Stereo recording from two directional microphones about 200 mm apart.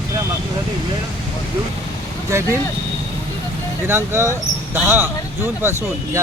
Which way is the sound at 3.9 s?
10° right (ahead or behind).